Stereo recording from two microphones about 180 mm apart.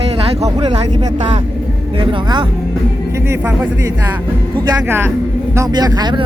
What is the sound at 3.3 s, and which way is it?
Speech, 15° right (ahead or behind).